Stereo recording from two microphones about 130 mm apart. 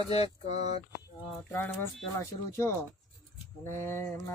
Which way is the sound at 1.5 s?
15° left (ahead or behind).